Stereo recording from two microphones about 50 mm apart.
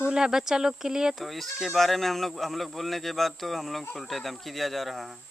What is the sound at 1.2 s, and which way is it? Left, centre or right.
Speech, centre.